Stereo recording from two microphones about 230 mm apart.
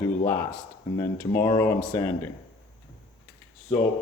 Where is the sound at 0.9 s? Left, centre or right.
Centre.